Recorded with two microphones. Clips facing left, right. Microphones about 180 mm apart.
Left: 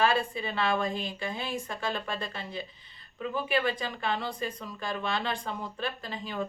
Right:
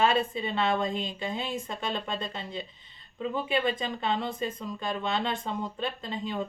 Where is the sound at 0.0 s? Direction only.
20° right (ahead or behind).